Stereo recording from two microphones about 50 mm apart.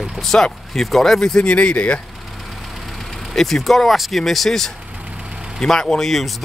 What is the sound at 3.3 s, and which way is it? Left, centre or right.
Speech, centre.